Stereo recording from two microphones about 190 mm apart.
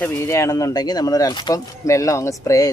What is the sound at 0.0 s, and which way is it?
Speech, 10° left (ahead or behind).